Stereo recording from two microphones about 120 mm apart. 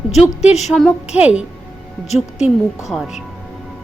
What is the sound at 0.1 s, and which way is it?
A woman's voice, 5° right (ahead or behind).